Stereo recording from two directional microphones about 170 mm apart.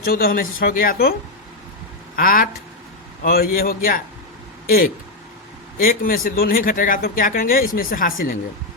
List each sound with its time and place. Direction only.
0.0 s speech: 60° left (ahead or behind)
2.1 s speech: 55° left (ahead or behind)
5.8 s speech: 60° left (ahead or behind)